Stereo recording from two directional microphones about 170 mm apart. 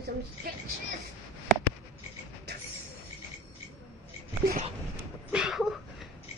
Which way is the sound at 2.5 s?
80° right.